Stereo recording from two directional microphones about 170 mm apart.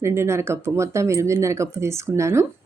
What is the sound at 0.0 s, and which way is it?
Speech, 15° right (ahead or behind).